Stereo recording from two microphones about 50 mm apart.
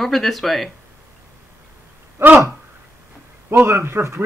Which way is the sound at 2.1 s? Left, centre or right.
Right.